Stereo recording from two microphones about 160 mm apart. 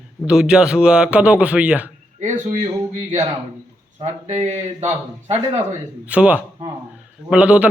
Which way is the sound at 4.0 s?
45° right (ahead or behind).